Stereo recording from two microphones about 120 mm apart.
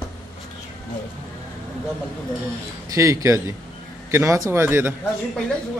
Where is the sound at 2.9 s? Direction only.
25° right (ahead or behind).